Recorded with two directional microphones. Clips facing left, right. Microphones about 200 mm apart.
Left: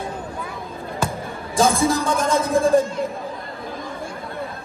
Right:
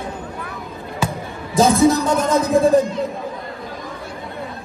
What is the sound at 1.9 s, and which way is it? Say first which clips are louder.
Speech: right 4 dB; centre (ahead or behind).